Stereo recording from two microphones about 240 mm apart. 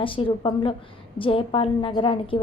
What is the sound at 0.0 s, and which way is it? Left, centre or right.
A woman's voice, left.